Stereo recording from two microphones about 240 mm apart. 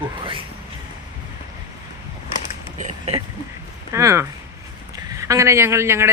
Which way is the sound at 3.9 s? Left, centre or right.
Centre.